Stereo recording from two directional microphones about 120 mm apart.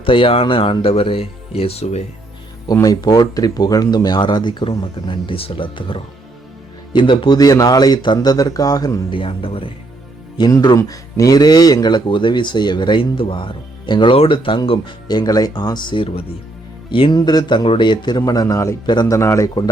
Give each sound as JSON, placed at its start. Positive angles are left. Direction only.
{"t": 0.0, "sound": "speech", "side_deg": 45}
{"t": 2.8, "sound": "speech", "side_deg": 30}
{"t": 7.3, "sound": "speech", "side_deg": 30}
{"t": 10.3, "sound": "speech", "side_deg": 35}
{"t": 17.2, "sound": "a man's voice", "side_deg": 35}
{"t": 18.9, "sound": "speech", "side_deg": 35}
{"t": 19.1, "sound": "a man's voice", "side_deg": 25}